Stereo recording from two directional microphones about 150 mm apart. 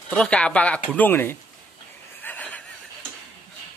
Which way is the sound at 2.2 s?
10° left (ahead or behind).